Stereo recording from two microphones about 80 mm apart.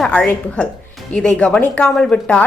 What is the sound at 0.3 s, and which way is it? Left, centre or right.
Speech, centre.